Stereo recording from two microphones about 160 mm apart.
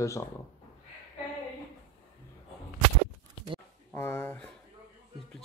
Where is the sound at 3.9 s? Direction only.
10° left (ahead or behind).